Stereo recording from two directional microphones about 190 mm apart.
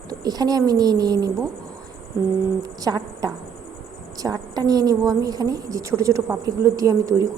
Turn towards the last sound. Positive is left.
turn(degrees=-15)  # may be behind; listen again after turning